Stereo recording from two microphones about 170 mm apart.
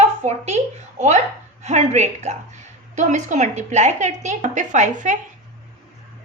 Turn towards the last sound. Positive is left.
turn(degrees=-45)  # may be behind; listen again after turning